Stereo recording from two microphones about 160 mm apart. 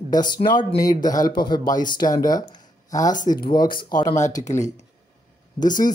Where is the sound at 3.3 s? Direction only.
40° left (ahead or behind).